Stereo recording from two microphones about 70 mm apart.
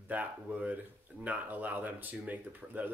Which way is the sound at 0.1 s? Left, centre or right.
Right.